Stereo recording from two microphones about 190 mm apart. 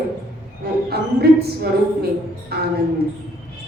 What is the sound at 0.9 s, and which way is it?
A woman's voice, 55° right (ahead or behind).